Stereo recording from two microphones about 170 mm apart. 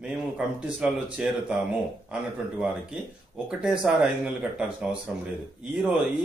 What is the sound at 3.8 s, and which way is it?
Speech, 5° right (ahead or behind).